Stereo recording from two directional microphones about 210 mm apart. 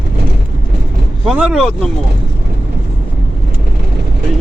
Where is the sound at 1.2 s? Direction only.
5° right (ahead or behind).